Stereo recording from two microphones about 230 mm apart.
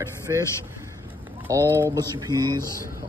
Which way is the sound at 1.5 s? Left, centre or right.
Centre.